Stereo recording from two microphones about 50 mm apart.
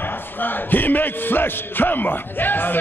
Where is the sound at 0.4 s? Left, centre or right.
Left.